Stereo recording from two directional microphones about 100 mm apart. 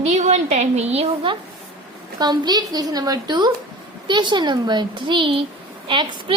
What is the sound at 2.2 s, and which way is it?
A woman's voice, 45° right (ahead or behind).